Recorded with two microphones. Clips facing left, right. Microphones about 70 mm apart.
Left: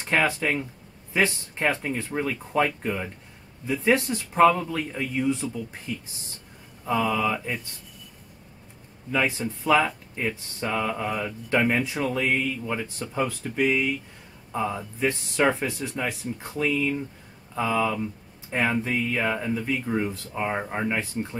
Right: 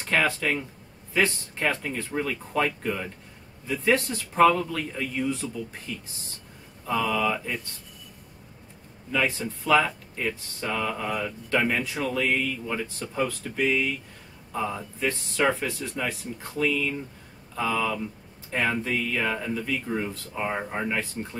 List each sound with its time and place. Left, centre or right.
0.0 s speech: centre
9.1 s speech: centre
20.0 s speech: centre